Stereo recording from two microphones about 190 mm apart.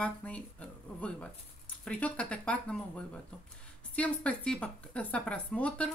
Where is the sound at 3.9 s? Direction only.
5° left (ahead or behind).